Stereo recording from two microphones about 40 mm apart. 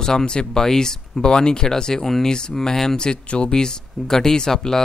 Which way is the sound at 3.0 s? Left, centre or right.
Left.